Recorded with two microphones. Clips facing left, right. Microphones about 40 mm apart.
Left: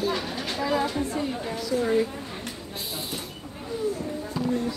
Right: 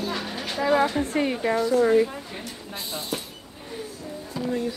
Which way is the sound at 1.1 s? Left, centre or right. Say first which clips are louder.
Right 6 dB; right.